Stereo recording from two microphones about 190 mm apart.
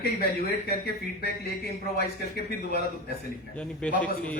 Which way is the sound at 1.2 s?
55° left (ahead or behind).